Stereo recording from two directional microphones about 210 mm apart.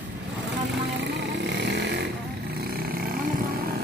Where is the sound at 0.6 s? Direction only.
55° right (ahead or behind).